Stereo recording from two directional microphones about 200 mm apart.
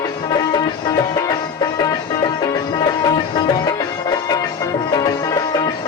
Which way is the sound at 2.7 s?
20° left (ahead or behind).